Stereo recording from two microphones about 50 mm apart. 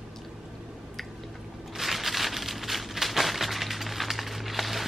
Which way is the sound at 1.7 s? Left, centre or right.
Centre.